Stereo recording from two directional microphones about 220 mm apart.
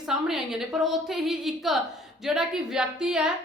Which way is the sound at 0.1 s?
5° right (ahead or behind).